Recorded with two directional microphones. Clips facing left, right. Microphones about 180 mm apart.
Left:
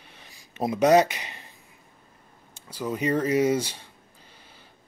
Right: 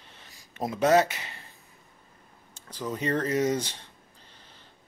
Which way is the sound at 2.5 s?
10° left (ahead or behind).